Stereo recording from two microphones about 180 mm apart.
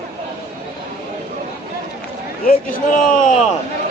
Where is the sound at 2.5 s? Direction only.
50° left (ahead or behind).